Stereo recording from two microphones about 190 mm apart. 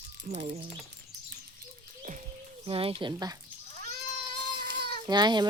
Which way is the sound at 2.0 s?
40° right (ahead or behind).